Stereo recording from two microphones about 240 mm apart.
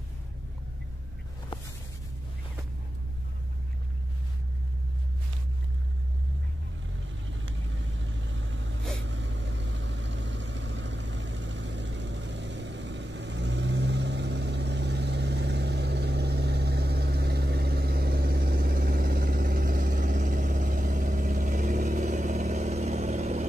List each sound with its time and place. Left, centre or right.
7.2 s vehicle: right